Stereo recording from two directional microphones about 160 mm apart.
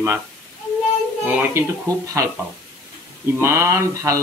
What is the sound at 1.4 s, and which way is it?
Speech, 15° right (ahead or behind).